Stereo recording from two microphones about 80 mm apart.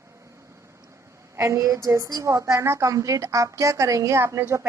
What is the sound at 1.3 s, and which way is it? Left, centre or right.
A woman's voice, right.